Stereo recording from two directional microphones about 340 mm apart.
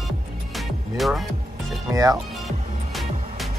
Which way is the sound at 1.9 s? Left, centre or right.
Centre.